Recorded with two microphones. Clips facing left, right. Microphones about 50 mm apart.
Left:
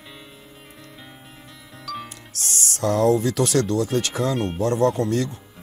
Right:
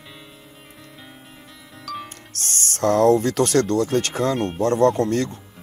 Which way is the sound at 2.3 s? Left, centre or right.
Right.